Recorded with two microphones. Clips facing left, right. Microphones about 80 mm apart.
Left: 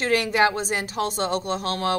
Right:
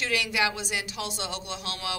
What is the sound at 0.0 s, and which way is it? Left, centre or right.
Speech, left.